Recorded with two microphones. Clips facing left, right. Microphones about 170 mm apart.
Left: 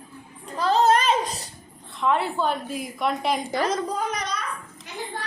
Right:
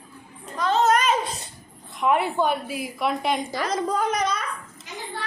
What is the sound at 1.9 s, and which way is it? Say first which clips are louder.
A woman's voice: right 2 dB; 15° right (ahead or behind).